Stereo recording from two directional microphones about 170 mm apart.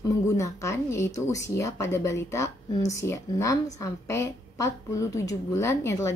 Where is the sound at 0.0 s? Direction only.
20° left (ahead or behind).